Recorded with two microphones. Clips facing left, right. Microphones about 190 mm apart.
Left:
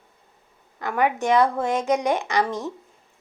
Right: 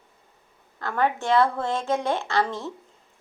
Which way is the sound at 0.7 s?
15° left (ahead or behind).